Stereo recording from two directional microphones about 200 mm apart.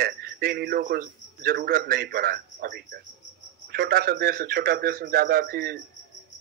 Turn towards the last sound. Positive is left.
turn(degrees=-50)  # may be behind; listen again after turning